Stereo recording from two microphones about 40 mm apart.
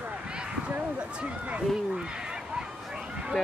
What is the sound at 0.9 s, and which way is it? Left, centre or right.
Speech, right.